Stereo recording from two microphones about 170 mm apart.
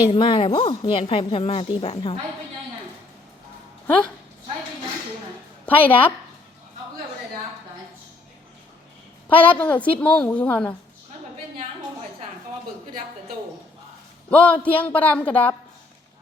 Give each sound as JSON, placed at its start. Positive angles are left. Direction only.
{"t": 0.0, "sound": "a woman's voice", "side_deg": 30}
{"t": 5.6, "sound": "a woman's voice", "side_deg": 10}
{"t": 9.3, "sound": "a woman's voice", "side_deg": 10}
{"t": 14.3, "sound": "a woman's voice", "side_deg": 10}